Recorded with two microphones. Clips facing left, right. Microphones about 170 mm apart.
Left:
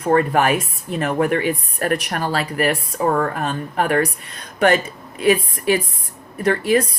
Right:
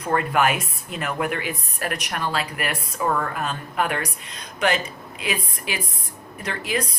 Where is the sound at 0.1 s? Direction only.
40° left (ahead or behind).